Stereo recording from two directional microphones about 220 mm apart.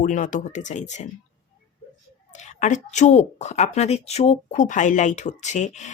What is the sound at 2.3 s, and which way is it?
A woman's voice, 35° left (ahead or behind).